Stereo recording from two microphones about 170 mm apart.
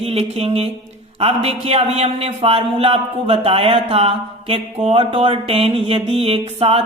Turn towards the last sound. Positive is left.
turn(degrees=-35)  # may be behind; listen again after turning